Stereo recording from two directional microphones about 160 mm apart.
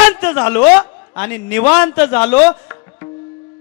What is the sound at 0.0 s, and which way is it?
A man's voice, 10° left (ahead or behind).